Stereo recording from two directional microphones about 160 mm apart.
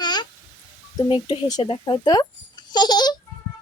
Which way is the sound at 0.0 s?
25° left (ahead or behind).